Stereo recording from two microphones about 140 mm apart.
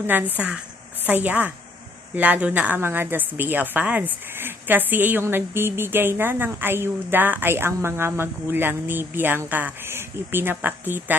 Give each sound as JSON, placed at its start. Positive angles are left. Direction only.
{"t": 0.3, "sound": "a woman's voice", "side_deg": -10}